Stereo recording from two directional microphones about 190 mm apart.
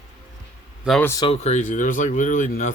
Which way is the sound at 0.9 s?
5° left (ahead or behind).